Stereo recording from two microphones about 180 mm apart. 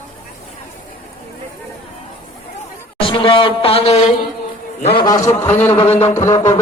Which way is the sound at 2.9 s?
30° left (ahead or behind).